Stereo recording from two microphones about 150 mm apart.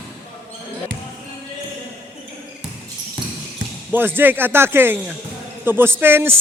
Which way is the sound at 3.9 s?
15° right (ahead or behind).